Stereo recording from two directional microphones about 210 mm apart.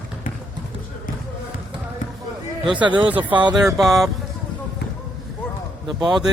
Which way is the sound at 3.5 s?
Centre (ahead or behind).